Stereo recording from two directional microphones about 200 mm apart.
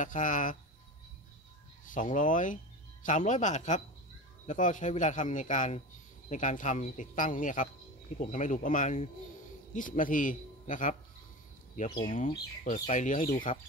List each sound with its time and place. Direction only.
0.0 s speech: 40° left (ahead or behind)
1.9 s speech: 40° left (ahead or behind)